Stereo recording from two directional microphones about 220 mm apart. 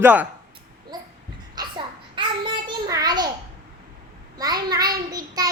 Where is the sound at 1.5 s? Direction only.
20° right (ahead or behind).